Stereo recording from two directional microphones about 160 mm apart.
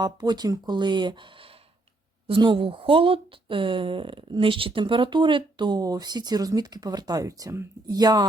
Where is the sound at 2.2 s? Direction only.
30° right (ahead or behind).